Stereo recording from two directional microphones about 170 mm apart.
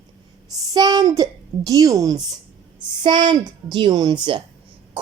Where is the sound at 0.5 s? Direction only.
20° right (ahead or behind).